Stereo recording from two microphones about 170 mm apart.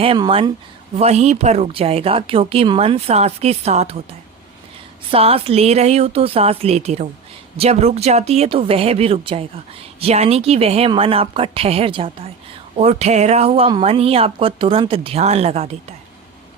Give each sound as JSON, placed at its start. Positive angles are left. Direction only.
{"t": 0.0, "sound": "a woman's voice", "side_deg": -30}
{"t": 0.9, "sound": "a woman's voice", "side_deg": -40}
{"t": 5.1, "sound": "a woman's voice", "side_deg": -35}